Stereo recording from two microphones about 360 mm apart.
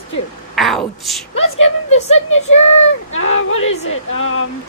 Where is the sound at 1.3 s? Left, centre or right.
Left.